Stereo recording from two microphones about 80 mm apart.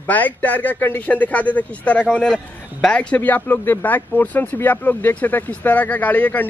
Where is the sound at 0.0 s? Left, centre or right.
Left.